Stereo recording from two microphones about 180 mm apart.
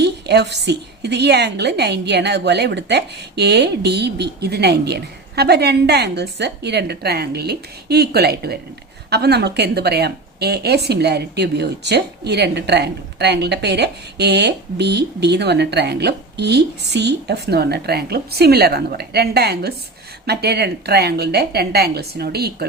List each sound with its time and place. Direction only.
0.0 s a woman's voice: 70° right (ahead or behind)